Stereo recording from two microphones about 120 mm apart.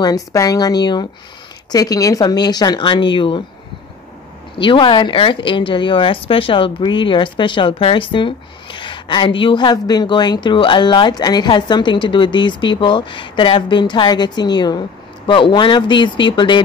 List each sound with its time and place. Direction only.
0.0 s a woman's voice: 30° left (ahead or behind)
4.6 s a woman's voice: 45° left (ahead or behind)